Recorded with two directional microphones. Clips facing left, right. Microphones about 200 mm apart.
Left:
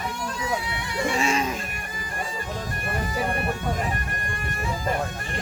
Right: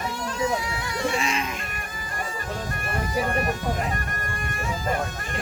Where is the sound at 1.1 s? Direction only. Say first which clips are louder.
Left 3 dB; 45° left (ahead or behind).